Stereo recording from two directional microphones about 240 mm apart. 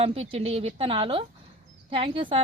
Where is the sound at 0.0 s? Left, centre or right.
Right.